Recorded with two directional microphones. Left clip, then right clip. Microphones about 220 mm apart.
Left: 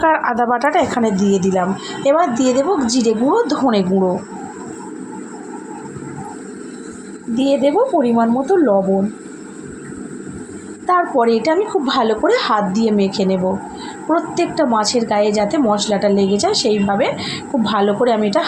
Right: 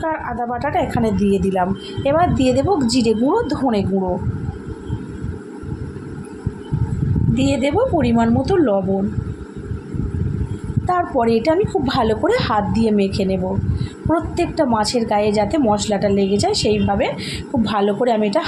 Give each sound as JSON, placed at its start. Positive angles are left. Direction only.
{"t": 0.0, "sound": "a woman's voice", "side_deg": 35}
{"t": 7.3, "sound": "a woman's voice", "side_deg": 20}
{"t": 10.8, "sound": "a woman's voice", "side_deg": 15}